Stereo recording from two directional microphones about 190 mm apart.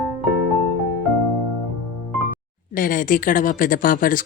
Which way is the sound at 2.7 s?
45° left (ahead or behind).